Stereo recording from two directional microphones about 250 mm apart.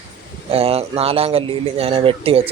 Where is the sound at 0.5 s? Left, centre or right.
Right.